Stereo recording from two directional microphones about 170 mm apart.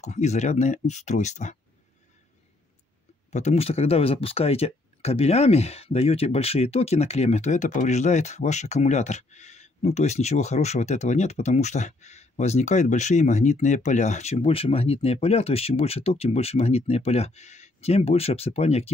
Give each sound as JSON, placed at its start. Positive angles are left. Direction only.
{"t": 0.0, "sound": "speech", "side_deg": 40}
{"t": 3.3, "sound": "speech", "side_deg": 40}